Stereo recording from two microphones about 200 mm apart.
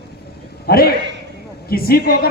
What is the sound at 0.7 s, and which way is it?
A man's voice, 50° left (ahead or behind).